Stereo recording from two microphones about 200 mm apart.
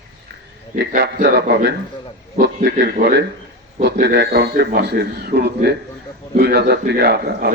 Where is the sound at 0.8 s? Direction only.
55° right (ahead or behind).